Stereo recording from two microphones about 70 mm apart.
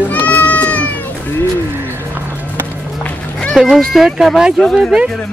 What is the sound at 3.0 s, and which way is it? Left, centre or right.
Music, centre.